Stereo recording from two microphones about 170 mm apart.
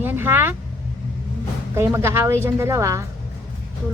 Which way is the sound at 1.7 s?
15° right (ahead or behind).